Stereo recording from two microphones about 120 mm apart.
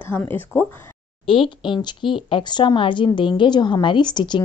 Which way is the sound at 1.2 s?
45° left (ahead or behind).